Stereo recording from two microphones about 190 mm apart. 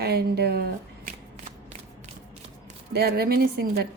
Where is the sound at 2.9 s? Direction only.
55° right (ahead or behind).